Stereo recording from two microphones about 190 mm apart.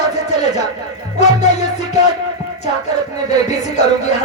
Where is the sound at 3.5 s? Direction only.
35° left (ahead or behind).